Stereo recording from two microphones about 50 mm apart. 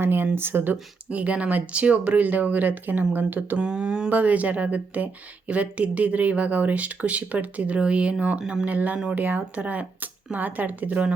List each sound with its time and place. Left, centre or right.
0.0 s speech: right
3.6 s speech: centre
4.1 s speech: right